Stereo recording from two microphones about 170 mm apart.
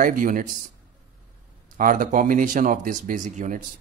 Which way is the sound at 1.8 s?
50° right (ahead or behind).